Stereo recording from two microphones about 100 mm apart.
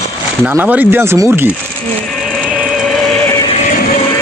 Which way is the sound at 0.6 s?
15° right (ahead or behind).